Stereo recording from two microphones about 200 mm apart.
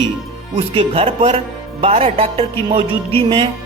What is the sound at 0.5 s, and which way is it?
Speech, 30° right (ahead or behind).